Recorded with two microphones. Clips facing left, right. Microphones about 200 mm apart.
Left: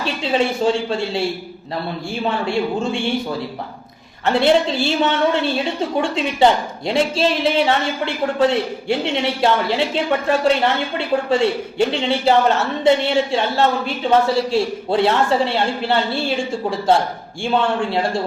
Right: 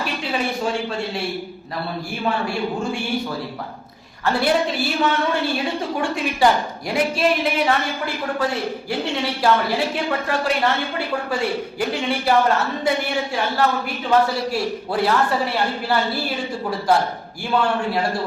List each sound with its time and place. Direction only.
0.0 s a woman's voice: 25° left (ahead or behind)
4.3 s a woman's voice: 25° left (ahead or behind)